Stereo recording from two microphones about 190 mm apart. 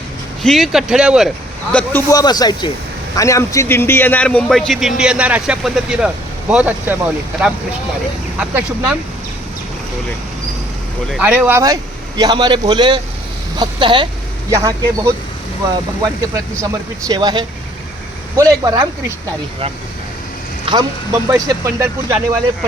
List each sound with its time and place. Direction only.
0.4 s a man's voice: centre (ahead or behind)
1.7 s a man's voice: 10° left (ahead or behind)
11.1 s a man's voice: 5° right (ahead or behind)
17.1 s a man's voice: 25° right (ahead or behind)
20.7 s a man's voice: 25° right (ahead or behind)
21.2 s speech: 15° right (ahead or behind)